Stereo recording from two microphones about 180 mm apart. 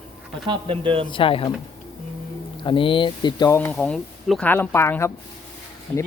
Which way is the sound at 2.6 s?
30° left (ahead or behind).